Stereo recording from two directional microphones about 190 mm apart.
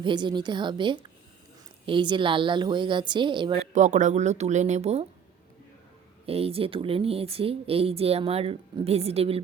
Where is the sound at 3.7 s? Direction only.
40° right (ahead or behind).